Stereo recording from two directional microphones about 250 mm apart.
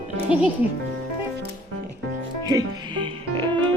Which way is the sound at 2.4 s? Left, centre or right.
Centre.